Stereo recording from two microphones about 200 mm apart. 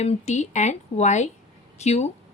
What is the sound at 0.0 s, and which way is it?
A woman's voice, 35° left (ahead or behind).